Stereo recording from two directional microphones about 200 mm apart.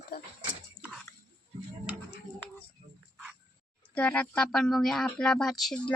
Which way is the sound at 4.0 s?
5° left (ahead or behind).